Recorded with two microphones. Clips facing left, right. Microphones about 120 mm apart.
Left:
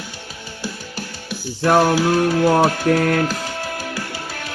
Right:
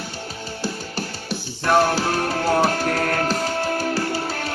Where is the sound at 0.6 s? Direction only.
35° right (ahead or behind).